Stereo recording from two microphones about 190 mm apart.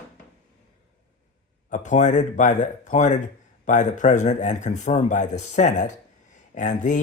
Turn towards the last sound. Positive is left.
turn(degrees=40)  # may be behind; listen again after turning